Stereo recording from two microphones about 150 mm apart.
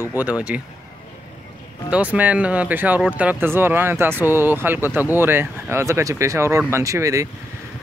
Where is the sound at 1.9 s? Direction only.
10° right (ahead or behind).